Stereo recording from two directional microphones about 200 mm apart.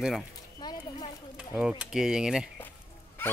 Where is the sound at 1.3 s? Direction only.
5° right (ahead or behind).